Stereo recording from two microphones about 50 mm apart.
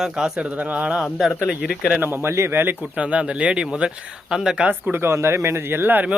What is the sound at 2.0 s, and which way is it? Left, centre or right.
Speech, right.